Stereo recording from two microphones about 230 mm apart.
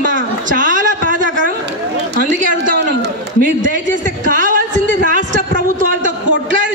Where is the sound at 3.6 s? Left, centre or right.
Right.